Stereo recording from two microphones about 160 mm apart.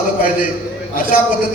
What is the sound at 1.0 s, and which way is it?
Speech, 60° left (ahead or behind).